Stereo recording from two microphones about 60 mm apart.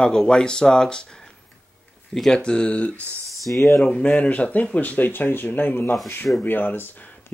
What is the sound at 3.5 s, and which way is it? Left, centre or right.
Speech, left.